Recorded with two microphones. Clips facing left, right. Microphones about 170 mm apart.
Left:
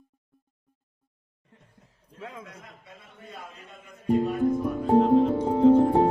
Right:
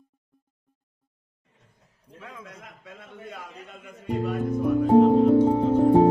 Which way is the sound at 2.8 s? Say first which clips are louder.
Right 6 dB; 90° right.